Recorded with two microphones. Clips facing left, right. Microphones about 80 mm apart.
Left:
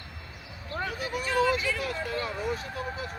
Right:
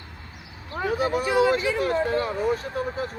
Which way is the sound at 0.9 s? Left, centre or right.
Right.